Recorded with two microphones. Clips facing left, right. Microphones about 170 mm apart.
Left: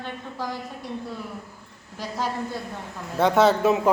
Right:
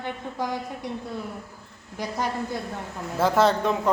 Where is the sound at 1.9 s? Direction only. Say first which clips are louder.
Right 1 dB; 15° right (ahead or behind).